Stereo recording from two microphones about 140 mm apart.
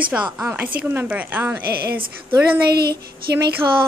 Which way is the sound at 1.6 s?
90° right.